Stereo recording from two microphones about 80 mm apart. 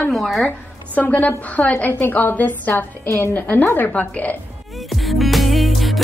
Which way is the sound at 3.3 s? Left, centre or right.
Left.